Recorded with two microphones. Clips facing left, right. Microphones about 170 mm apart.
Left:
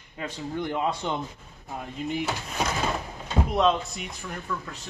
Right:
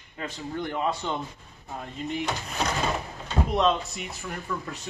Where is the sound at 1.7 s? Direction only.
5° left (ahead or behind).